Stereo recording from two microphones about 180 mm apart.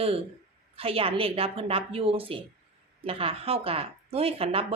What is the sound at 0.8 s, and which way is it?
A woman's voice, 30° right (ahead or behind).